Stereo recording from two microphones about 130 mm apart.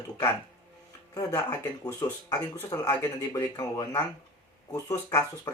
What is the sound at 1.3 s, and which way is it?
Speech, 15° left (ahead or behind).